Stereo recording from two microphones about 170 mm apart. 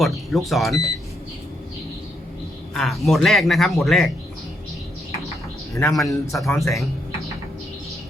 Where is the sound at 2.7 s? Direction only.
Centre (ahead or behind).